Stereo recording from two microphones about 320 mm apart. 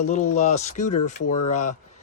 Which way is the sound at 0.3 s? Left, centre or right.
Left.